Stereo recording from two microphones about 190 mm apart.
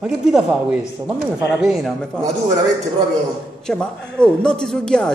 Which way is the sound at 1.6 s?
Centre (ahead or behind).